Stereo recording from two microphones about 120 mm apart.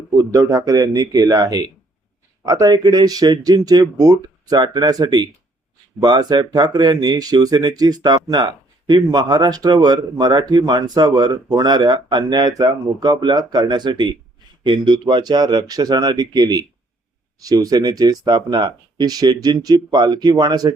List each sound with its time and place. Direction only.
0.2 s speech: 30° right (ahead or behind)